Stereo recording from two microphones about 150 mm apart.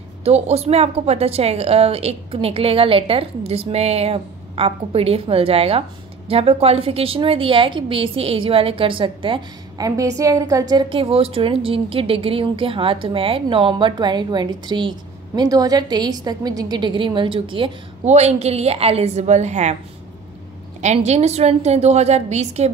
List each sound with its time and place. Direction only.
0.2 s a woman's voice: 45° right (ahead or behind)
9.8 s a woman's voice: 20° right (ahead or behind)
18.0 s a woman's voice: 45° right (ahead or behind)
20.8 s a woman's voice: 50° right (ahead or behind)